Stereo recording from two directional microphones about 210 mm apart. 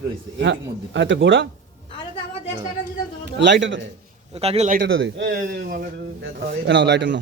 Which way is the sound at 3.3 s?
60° right (ahead or behind).